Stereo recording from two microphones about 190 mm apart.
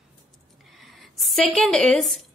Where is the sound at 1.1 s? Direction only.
Centre (ahead or behind).